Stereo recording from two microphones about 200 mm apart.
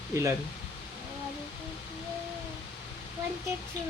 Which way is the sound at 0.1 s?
15° right (ahead or behind).